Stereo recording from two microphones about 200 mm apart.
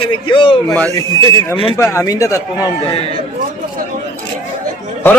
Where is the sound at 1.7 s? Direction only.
15° left (ahead or behind).